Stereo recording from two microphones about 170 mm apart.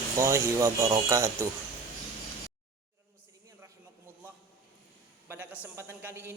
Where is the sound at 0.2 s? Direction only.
15° right (ahead or behind).